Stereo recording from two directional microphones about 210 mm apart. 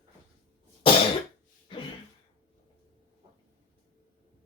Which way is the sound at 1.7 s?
25° left (ahead or behind).